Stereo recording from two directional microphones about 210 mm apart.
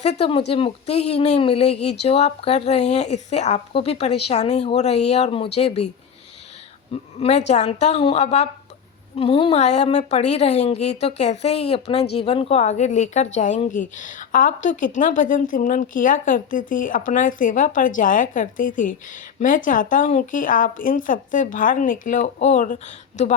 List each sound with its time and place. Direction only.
0.0 s a woman's voice: 30° left (ahead or behind)
7.2 s speech: 35° left (ahead or behind)